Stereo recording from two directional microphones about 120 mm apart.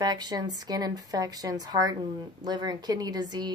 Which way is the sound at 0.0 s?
35° right (ahead or behind).